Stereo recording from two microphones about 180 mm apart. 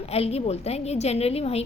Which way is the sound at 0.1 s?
35° left (ahead or behind).